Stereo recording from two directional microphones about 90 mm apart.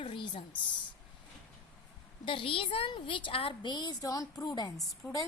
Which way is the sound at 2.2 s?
80° left.